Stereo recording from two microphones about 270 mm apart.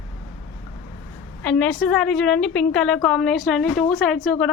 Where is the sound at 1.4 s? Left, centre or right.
Centre.